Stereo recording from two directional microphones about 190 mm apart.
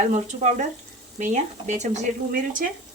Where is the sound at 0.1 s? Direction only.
40° right (ahead or behind).